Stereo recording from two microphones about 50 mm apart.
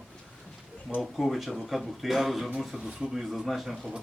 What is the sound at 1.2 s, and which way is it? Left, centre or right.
Speech, centre.